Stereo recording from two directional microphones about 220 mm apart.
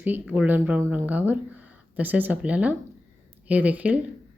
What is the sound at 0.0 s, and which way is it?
Speech, 10° right (ahead or behind).